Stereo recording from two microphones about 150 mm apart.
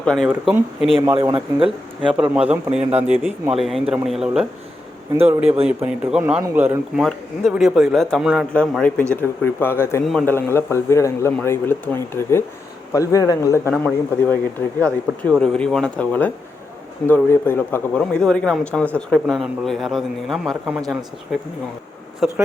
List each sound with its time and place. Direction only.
0.0 s speech: 5° left (ahead or behind)
0.3 s speech: 10° right (ahead or behind)
1.2 s speech: 35° right (ahead or behind)
2.3 s speech: 10° right (ahead or behind)
3.6 s speech: centre (ahead or behind)
6.9 s speech: centre (ahead or behind)
10.0 s speech: centre (ahead or behind)
10.2 s a man's voice: 15° left (ahead or behind)
13.8 s speech: 10° left (ahead or behind)
22.2 s speech: centre (ahead or behind)